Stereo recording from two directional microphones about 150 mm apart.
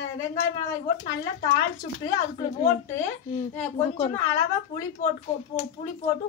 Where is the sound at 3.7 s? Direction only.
45° left (ahead or behind).